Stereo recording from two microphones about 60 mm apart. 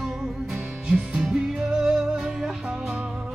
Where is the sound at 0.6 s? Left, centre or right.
Centre.